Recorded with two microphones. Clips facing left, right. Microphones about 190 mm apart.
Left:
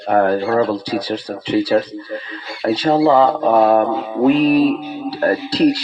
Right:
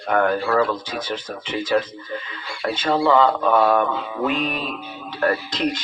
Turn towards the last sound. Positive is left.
turn(degrees=35)  # may be behind; listen again after turning